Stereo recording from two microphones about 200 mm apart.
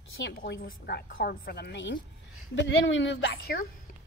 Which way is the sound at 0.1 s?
65° left (ahead or behind).